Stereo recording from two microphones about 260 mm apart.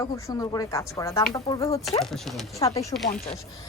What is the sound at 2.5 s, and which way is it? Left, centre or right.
Speech, centre.